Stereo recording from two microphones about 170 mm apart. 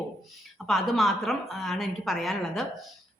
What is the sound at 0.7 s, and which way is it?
A woman's voice, centre (ahead or behind).